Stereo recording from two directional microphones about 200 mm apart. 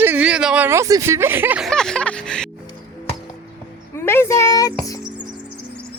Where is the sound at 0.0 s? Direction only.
10° right (ahead or behind).